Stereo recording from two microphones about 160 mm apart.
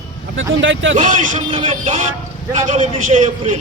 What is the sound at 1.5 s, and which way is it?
Speech, 35° right (ahead or behind).